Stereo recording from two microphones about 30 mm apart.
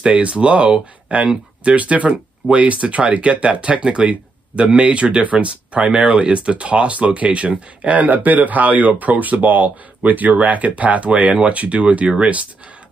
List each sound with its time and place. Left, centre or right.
0.0 s speech: right
1.8 s speech: right
3.3 s speech: right
5.9 s speech: right